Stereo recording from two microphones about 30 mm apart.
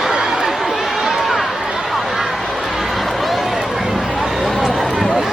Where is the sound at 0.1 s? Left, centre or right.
Right.